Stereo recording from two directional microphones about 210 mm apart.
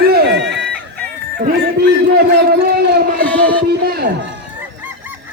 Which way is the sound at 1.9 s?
50° right (ahead or behind).